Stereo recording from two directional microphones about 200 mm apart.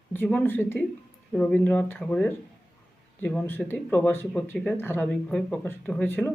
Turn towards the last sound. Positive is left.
turn(degrees=10)  # may be behind; listen again after turning